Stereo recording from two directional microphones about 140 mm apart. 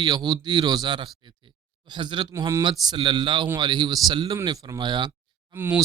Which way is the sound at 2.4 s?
25° right (ahead or behind).